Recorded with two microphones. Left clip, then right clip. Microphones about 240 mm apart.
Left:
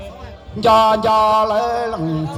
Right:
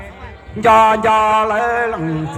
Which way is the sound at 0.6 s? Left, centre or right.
Centre.